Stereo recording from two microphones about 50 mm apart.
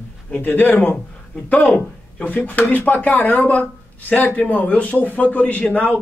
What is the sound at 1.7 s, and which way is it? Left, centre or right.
A man's voice, left.